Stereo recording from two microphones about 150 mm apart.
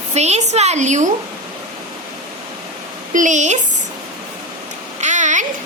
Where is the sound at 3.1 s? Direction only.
55° right (ahead or behind).